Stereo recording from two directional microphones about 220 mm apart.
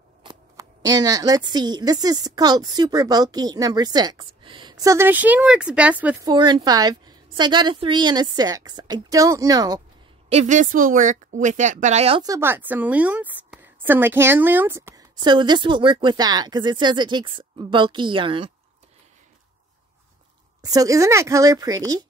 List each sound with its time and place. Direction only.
0.2 s speech: 20° right (ahead or behind)
6.2 s speech: 20° right (ahead or behind)
10.3 s speech: 35° right (ahead or behind)
20.6 s speech: 15° right (ahead or behind)